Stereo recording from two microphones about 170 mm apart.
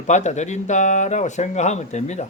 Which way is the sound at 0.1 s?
45° left (ahead or behind).